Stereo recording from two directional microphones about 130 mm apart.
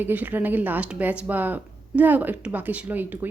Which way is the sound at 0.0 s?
15° right (ahead or behind).